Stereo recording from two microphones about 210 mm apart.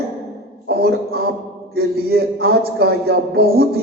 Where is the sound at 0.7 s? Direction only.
50° right (ahead or behind).